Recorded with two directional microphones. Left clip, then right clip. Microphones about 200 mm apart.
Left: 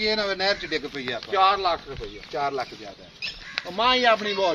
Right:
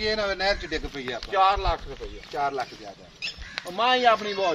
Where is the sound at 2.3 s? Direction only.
30° left (ahead or behind).